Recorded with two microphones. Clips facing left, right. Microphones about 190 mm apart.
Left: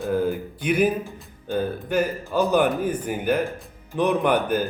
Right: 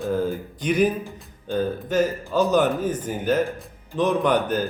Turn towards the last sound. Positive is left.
turn(degrees=10)  # may be behind; listen again after turning